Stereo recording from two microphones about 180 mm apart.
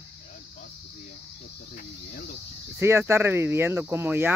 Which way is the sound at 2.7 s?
15° right (ahead or behind).